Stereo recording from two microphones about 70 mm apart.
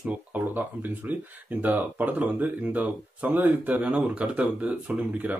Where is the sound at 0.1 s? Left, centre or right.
Right.